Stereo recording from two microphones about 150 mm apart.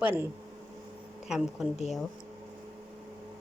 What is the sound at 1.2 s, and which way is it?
Speech, 5° right (ahead or behind).